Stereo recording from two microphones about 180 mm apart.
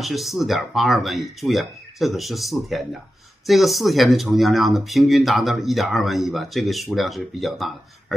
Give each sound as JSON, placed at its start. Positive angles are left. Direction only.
{"t": 0.0, "sound": "speech", "side_deg": 0}